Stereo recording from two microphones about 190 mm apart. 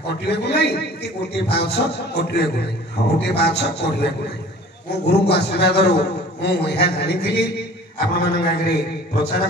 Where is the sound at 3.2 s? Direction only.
60° left (ahead or behind).